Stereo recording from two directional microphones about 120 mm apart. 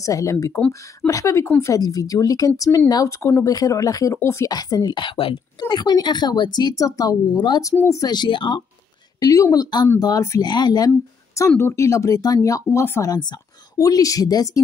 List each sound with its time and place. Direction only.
0.0 s speech: 25° left (ahead or behind)
7.7 s speech: 25° left (ahead or behind); by 8.6 s 45° left (ahead or behind)
9.2 s speech: 30° left (ahead or behind)
11.3 s speech: 20° left (ahead or behind)